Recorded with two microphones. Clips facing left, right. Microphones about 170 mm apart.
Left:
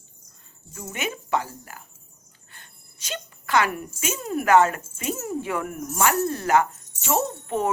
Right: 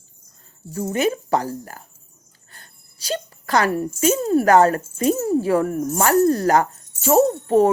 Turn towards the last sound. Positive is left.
turn(degrees=-35)  # may be behind; listen again after turning